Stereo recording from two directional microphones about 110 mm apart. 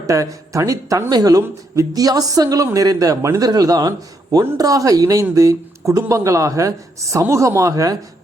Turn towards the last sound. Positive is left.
turn(degrees=-30)  # may be behind; listen again after turning